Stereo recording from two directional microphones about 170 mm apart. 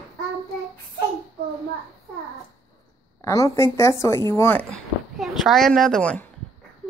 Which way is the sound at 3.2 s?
15° left (ahead or behind).